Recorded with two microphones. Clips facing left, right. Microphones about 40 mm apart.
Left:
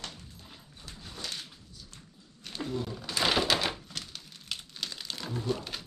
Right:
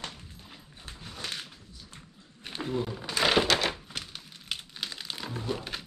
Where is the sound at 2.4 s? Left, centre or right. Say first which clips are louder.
Right 3 dB; right.